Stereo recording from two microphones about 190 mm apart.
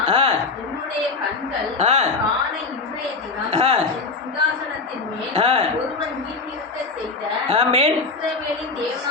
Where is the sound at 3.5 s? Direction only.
30° right (ahead or behind).